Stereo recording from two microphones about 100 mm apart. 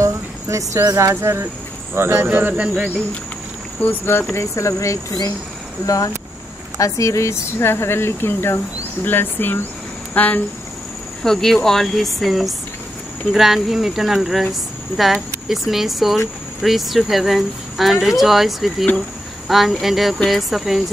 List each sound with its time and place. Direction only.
0.0 s speech: 30° right (ahead or behind); by 2.7 s 15° right (ahead or behind)
3.8 s speech: 20° left (ahead or behind)
11.2 s speech: 5° left (ahead or behind)